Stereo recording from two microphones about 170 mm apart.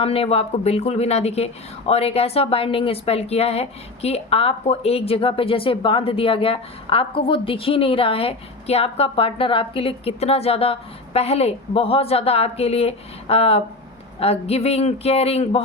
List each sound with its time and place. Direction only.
0.0 s a woman's voice: 35° left (ahead or behind)